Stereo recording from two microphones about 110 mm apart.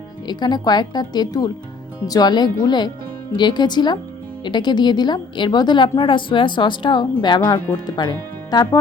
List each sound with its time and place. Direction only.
0.3 s speech: 40° left (ahead or behind)